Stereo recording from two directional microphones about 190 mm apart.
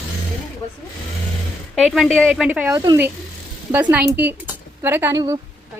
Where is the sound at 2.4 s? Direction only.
10° right (ahead or behind).